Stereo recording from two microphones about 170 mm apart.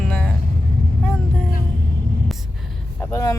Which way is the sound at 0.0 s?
5° left (ahead or behind).